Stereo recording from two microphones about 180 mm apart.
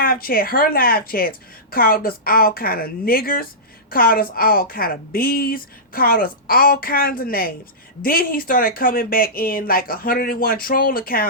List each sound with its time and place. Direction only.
0.0 s a woman's voice: 55° left (ahead or behind)